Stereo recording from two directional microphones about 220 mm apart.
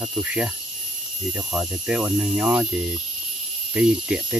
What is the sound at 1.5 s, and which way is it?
Speech, 5° right (ahead or behind).